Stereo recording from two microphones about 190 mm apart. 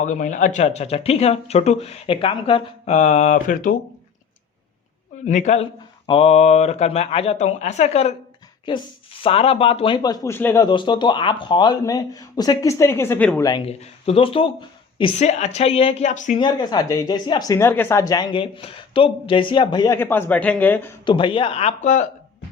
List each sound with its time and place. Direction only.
0.0 s speech: 40° left (ahead or behind)
5.2 s speech: 40° left (ahead or behind); by 13.6 s 15° left (ahead or behind)
13.7 s speech: 30° left (ahead or behind)
16.4 s speech: 20° left (ahead or behind)
21.0 s speech: 25° left (ahead or behind)